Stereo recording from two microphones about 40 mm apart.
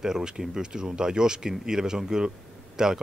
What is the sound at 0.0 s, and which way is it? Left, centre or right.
Speech, centre.